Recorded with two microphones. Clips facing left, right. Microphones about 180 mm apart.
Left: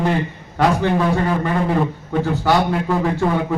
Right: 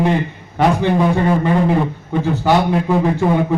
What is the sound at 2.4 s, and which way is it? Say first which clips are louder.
Speech: right 4 dB; 15° right (ahead or behind).